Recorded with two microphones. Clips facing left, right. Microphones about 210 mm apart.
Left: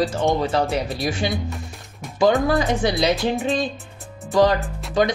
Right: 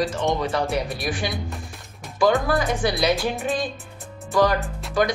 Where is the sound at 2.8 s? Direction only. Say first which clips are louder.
Left 2 dB; 20° left (ahead or behind).